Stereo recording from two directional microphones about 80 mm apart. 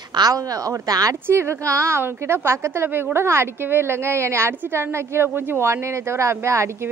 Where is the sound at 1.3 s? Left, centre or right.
Right.